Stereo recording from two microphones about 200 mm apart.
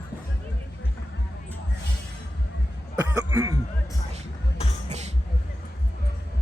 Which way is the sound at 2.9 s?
15° right (ahead or behind).